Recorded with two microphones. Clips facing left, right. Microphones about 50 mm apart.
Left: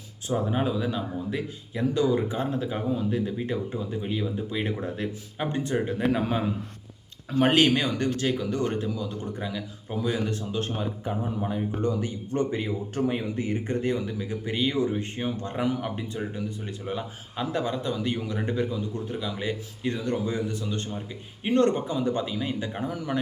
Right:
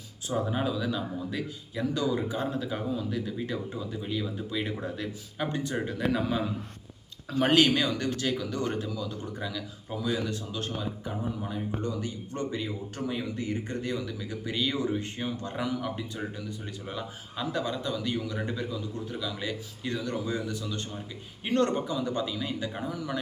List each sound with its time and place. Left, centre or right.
0.3 s speech: left
8.3 s speech: left